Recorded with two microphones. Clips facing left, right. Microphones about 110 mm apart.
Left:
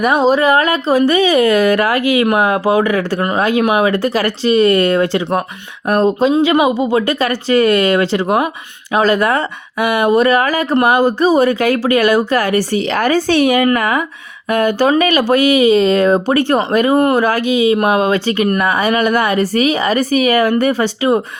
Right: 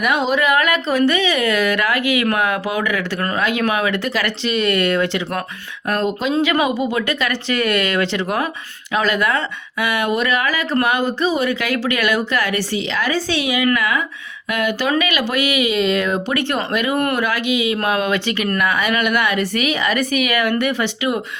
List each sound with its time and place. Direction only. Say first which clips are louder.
0.0 s speech: left 6 dB; 35° left (ahead or behind)
3.2 s speech: left 6 dB; 25° left (ahead or behind)
3.8 s speech: left 6 dB; 40° left (ahead or behind)
6.4 s a woman's voice: left 5 dB; 25° left (ahead or behind)
17.7 s speech: left 6 dB; 20° left (ahead or behind)
18.0 s speech: left 6 dB; 35° left (ahead or behind)